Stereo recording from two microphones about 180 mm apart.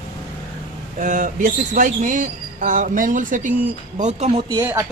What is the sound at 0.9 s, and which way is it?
Speech, 45° right (ahead or behind).